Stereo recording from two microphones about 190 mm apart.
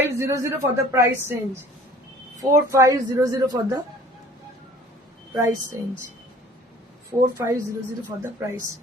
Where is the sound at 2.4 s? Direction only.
15° right (ahead or behind).